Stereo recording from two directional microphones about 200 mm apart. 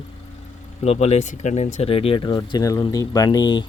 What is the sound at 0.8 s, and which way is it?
Speech, 35° left (ahead or behind).